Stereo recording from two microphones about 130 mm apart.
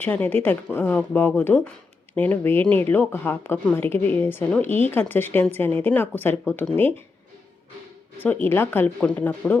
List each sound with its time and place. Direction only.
0.0 s speech: 15° left (ahead or behind)
8.2 s speech: 15° left (ahead or behind)